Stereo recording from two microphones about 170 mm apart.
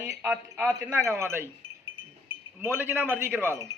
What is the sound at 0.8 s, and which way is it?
Speech, 15° right (ahead or behind).